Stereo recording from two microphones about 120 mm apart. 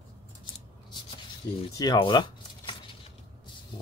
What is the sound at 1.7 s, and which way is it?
Speech, 35° left (ahead or behind).